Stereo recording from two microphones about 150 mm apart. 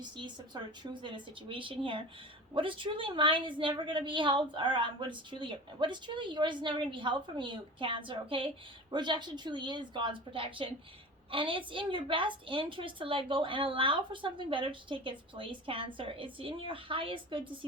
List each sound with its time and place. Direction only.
1.0 s a woman's voice: 35° right (ahead or behind)